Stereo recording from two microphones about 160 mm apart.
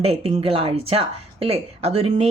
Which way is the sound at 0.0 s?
40° right (ahead or behind).